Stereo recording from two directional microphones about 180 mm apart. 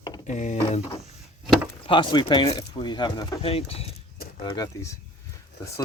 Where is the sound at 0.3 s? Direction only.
40° left (ahead or behind).